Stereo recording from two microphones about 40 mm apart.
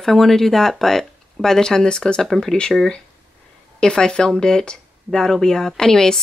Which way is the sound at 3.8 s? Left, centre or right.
Centre.